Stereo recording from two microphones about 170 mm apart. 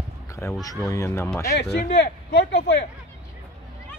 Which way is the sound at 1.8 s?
85° left.